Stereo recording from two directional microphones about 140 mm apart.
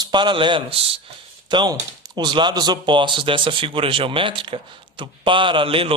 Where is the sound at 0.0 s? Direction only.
35° right (ahead or behind).